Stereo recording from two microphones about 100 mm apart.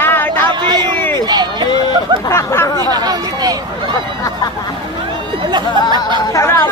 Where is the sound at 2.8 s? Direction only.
40° right (ahead or behind).